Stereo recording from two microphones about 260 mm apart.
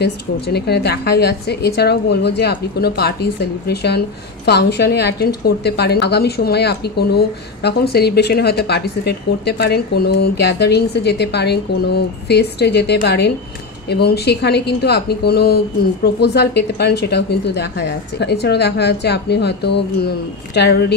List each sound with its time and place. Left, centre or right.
0.0 s a woman's voice: left